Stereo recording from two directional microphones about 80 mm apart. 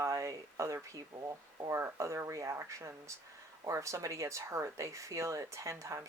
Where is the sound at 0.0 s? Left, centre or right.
Right.